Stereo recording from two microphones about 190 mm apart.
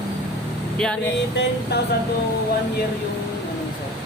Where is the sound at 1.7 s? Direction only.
60° left (ahead or behind).